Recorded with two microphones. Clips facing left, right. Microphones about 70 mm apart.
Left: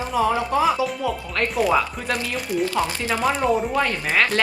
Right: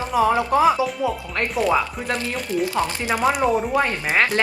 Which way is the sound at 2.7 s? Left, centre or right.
Centre.